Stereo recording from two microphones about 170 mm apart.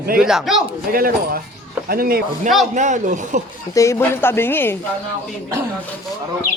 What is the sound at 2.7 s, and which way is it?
Speech, 45° right (ahead or behind).